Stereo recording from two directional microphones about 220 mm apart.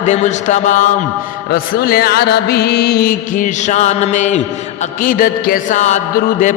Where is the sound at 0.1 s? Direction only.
35° left (ahead or behind).